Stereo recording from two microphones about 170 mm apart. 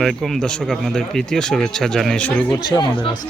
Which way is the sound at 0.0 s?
Centre (ahead or behind).